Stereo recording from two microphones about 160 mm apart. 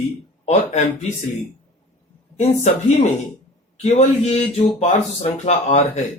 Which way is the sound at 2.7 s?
45° left (ahead or behind).